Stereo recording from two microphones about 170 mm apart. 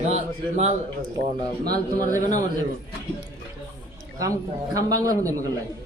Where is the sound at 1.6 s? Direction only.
60° right (ahead or behind).